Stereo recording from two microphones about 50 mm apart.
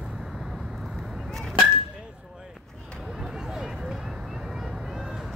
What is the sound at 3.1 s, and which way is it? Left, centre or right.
Vehicle, centre.